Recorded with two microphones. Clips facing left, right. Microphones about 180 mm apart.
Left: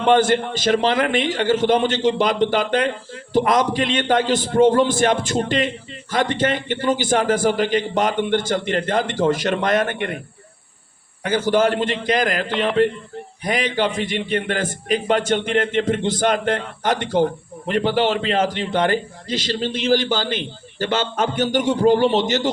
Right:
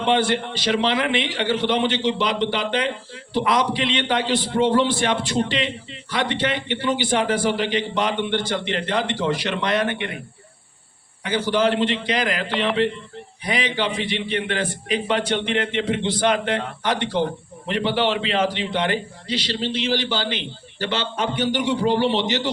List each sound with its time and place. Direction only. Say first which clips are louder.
0.0 s a man's voice: left 4 dB; 45° left (ahead or behind)
11.2 s a man's voice: left 3 dB; 45° left (ahead or behind)